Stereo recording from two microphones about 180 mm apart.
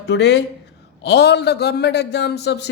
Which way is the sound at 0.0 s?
70° left (ahead or behind).